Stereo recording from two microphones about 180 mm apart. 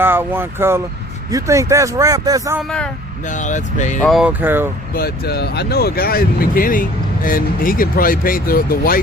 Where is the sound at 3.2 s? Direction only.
45° left (ahead or behind).